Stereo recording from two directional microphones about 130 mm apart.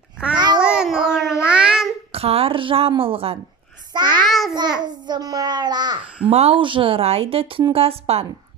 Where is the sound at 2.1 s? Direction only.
50° right (ahead or behind).